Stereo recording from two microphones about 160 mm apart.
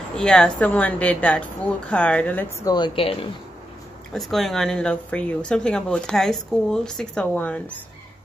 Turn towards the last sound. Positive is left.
turn(degrees=10)  # may be behind; listen again after turning